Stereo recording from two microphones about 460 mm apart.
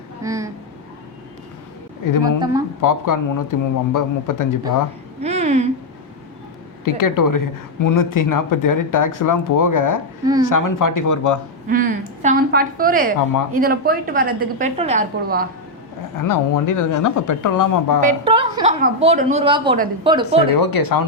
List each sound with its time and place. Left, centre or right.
0.2 s vehicle: centre
2.4 s a woman's voice: centre
2.8 s speech: left
5.2 s speech: centre
6.8 s a woman's voice: left
11.7 s a woman's voice: centre
16.1 s speech: left
18.0 s a woman's voice: centre
20.6 s a woman's voice: left